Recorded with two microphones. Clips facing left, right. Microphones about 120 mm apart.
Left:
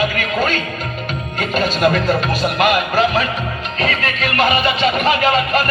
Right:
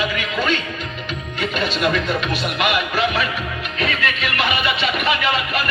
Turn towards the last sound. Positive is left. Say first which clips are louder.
# left 6 dB
turn(degrees=40)  # may be behind; listen again after turning